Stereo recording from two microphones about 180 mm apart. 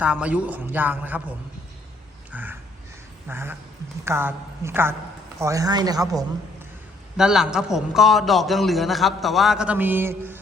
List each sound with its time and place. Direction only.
0.0 s a man's voice: 5° right (ahead or behind)
2.3 s crow: 10° right (ahead or behind)
3.2 s a man's voice: 15° right (ahead or behind)
7.2 s a man's voice: 5° right (ahead or behind)